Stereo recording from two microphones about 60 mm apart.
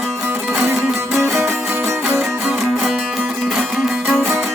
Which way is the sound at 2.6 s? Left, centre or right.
Centre.